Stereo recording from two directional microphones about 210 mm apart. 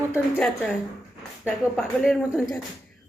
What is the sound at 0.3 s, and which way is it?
Speech, centre (ahead or behind).